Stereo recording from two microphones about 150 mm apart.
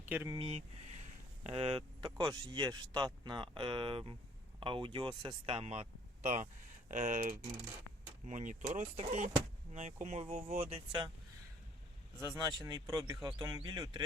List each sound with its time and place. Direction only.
0.0 s speech: 10° right (ahead or behind)
0.3 s speech: 35° right (ahead or behind)
10.6 s speech: 35° right (ahead or behind)
12.4 s speech: 25° right (ahead or behind)